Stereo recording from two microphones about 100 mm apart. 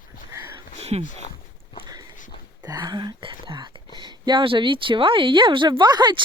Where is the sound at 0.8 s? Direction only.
90° right.